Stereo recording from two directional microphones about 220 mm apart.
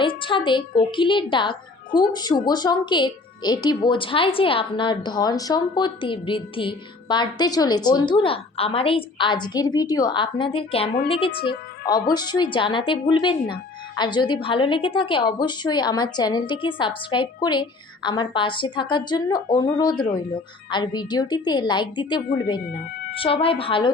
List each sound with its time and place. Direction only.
0.0 s speech: 20° left (ahead or behind)
12.1 s speech: 20° left (ahead or behind)